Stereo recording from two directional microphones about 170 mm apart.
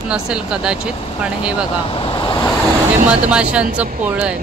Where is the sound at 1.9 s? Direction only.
30° left (ahead or behind).